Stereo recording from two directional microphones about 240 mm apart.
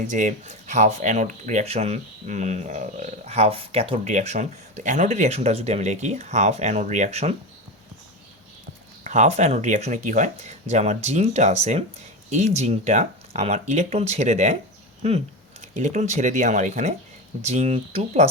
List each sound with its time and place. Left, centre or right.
0.1 s speech: right
9.0 s speech: right